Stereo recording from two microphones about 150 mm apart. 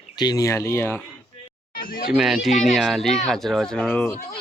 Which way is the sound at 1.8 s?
70° left (ahead or behind).